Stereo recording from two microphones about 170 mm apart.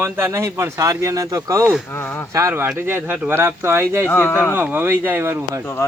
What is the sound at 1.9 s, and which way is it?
Speech, 15° left (ahead or behind).